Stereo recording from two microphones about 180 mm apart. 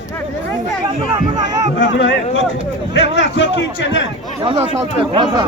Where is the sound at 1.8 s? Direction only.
85° left.